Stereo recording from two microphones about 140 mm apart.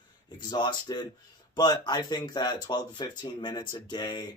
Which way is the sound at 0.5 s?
30° left (ahead or behind).